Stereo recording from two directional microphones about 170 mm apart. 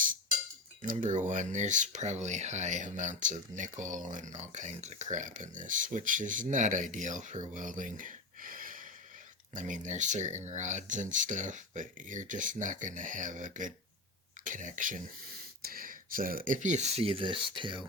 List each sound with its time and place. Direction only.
0.8 s speech: 50° right (ahead or behind); by 17.8 s 30° right (ahead or behind)